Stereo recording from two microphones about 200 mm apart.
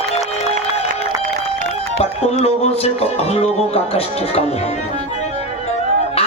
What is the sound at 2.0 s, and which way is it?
Speech, 30° left (ahead or behind).